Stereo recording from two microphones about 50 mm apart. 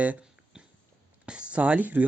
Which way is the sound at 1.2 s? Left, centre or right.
Right.